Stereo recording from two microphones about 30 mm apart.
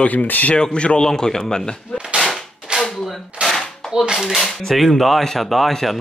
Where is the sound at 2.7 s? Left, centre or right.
Right.